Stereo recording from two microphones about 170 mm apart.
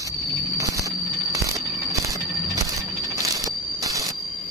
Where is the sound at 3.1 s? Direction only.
20° right (ahead or behind).